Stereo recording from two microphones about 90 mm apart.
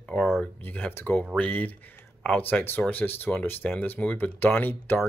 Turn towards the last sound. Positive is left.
turn(degrees=25)  # may be behind; listen again after turning